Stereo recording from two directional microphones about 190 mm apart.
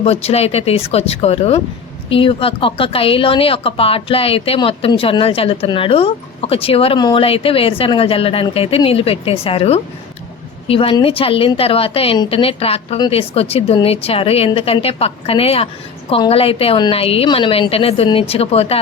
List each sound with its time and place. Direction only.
0.0 s a woman's voice: 30° left (ahead or behind)